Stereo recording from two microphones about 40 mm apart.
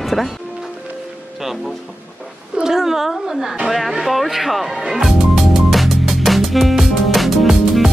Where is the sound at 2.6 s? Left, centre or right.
Centre.